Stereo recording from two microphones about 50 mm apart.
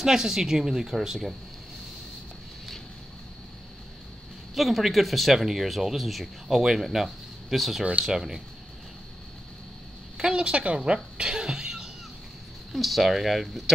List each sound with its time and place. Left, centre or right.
0.0 s speech: centre
4.6 s speech: centre
10.3 s speech: right
12.7 s speech: centre